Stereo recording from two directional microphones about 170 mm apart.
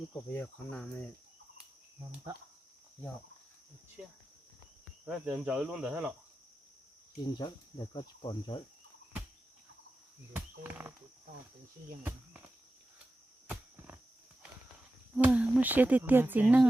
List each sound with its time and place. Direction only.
0.1 s cricket: 10° left (ahead or behind)
5.0 s speech: 5° right (ahead or behind)
7.3 s cricket: 25° left (ahead or behind)
10.3 s speech: 10° right (ahead or behind)
13.5 s a sound: 10° right (ahead or behind)
15.1 s speech: 5° right (ahead or behind)